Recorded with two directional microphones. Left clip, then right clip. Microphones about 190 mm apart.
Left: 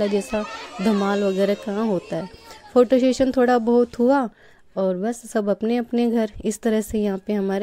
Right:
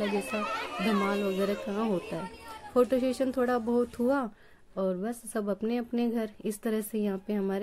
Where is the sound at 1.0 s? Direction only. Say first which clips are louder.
Left 9 dB; 40° left (ahead or behind).